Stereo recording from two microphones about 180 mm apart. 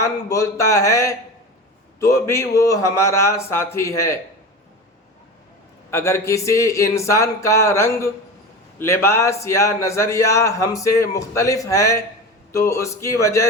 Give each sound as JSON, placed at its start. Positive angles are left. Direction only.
{"t": 0.0, "sound": "speech", "side_deg": 15}
{"t": 5.9, "sound": "speech", "side_deg": 15}